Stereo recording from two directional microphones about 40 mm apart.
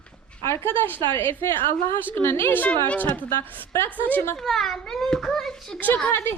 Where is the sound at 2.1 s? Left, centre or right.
Left.